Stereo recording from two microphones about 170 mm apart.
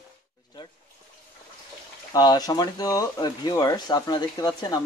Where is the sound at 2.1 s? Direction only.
25° left (ahead or behind).